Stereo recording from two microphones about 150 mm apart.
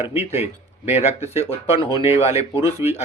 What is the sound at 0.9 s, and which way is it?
Speech, 45° left (ahead or behind).